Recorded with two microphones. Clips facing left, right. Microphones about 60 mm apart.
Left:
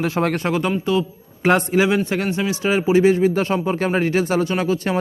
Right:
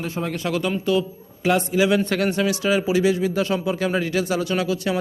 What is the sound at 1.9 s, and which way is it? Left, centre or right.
A man's voice, left.